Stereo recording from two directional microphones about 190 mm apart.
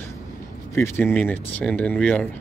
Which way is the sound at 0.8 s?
10° left (ahead or behind).